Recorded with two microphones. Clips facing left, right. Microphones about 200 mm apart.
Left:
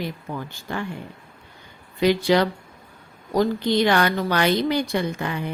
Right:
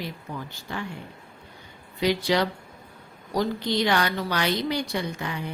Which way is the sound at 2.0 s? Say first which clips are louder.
Left 5 dB; 55° left (ahead or behind).